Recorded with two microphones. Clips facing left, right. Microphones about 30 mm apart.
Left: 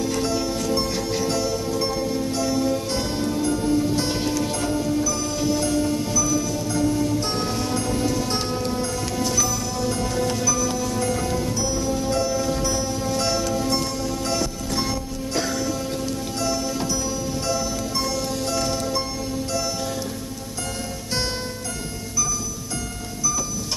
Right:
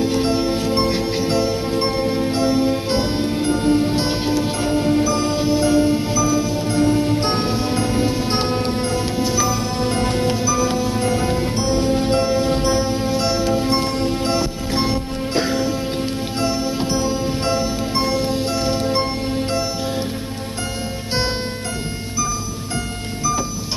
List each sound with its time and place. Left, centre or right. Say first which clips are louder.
0.0 s music: right 5 dB; right
9.2 s music: right 3 dB; right
9.8 s music: right 2 dB; right
13.2 s music: right 3 dB; right
13.5 s music: right 5 dB; right